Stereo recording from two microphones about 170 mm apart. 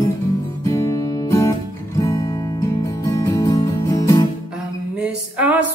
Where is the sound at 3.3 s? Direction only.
20° left (ahead or behind).